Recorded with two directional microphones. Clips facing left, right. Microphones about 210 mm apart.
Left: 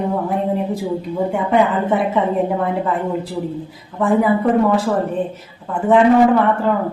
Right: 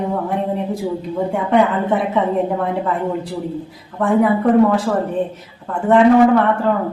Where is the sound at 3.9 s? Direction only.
Centre (ahead or behind).